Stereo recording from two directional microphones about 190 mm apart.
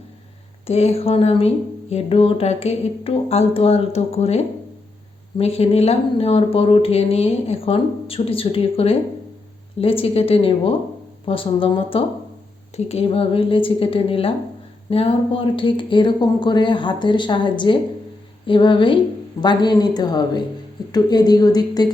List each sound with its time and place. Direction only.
0.7 s speech: 35° left (ahead or behind)